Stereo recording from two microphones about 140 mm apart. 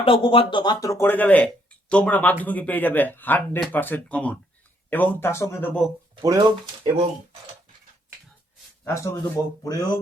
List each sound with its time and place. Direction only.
0.0 s speech: 40° left (ahead or behind); by 5.7 s 15° left (ahead or behind)
6.2 s speech: 25° right (ahead or behind)
8.8 s speech: 20° left (ahead or behind)